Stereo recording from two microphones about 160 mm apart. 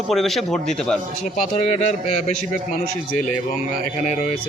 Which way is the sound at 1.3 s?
50° left (ahead or behind).